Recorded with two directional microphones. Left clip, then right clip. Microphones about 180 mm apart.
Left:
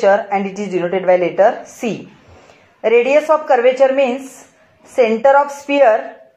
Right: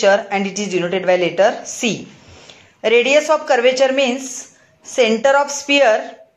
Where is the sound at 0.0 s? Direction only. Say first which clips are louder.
Left 1 dB; 30° right (ahead or behind).